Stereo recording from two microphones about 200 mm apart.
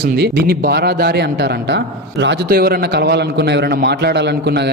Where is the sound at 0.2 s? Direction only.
50° right (ahead or behind).